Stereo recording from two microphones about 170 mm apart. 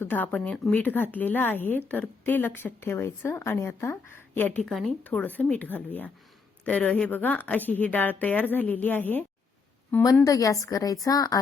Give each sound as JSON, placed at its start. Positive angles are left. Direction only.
{"t": 0.0, "sound": "a woman's voice", "side_deg": 10}